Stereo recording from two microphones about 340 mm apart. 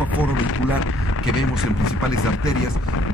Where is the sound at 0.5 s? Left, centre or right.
Left.